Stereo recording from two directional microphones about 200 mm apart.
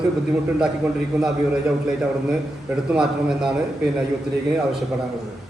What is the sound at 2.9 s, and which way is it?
Speech, 5° right (ahead or behind).